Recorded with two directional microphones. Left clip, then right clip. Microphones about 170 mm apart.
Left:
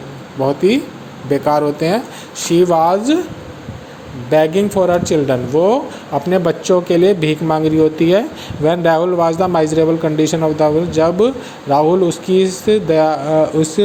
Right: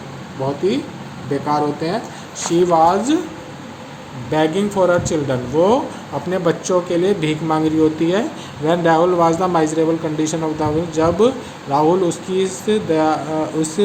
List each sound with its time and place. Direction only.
0.4 s speech: 40° left (ahead or behind)
4.3 s a man's voice: 30° left (ahead or behind)